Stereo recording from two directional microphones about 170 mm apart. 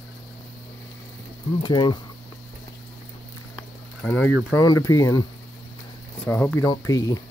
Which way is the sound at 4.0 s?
5° left (ahead or behind).